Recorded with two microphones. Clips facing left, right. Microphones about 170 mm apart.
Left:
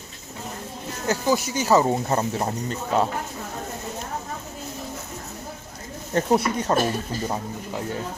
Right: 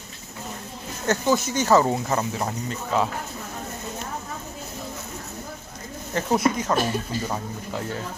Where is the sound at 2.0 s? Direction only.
30° left (ahead or behind).